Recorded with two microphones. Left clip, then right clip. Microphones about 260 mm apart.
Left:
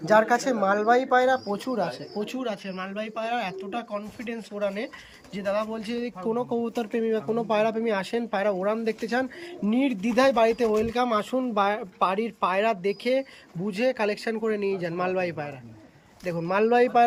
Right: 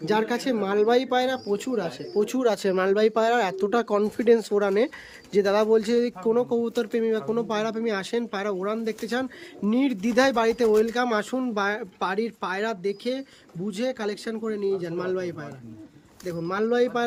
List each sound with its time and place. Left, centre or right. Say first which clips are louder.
0.0 s speech: left 4 dB; centre
2.2 s speech: right 9 dB; centre